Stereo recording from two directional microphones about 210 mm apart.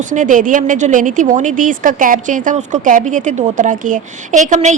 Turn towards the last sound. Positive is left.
turn(degrees=-35)  # may be behind; listen again after turning